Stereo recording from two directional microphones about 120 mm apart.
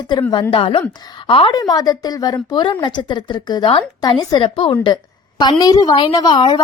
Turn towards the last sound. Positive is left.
turn(degrees=40)  # may be behind; listen again after turning